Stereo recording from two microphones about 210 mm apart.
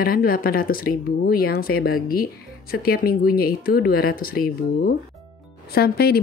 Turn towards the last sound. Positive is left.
turn(degrees=50)  # may be behind; listen again after turning